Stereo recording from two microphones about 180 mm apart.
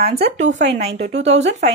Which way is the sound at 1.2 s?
35° right (ahead or behind).